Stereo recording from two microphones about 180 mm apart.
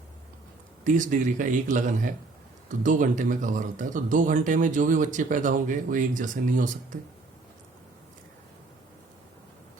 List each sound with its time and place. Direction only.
0.9 s speech: 45° right (ahead or behind)